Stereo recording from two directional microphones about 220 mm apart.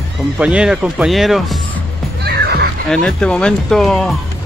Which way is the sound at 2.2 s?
45° right (ahead or behind).